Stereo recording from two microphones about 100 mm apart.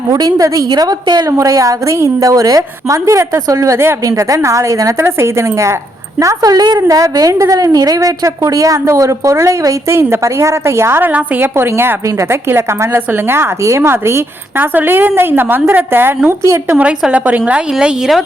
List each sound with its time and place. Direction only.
0.1 s a woman's voice: 40° right (ahead or behind)
1.3 s a woman's voice: 30° right (ahead or behind); by 18.2 s 10° right (ahead or behind)